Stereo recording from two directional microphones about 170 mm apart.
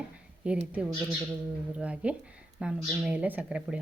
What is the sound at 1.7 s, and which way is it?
Speech, 5° right (ahead or behind).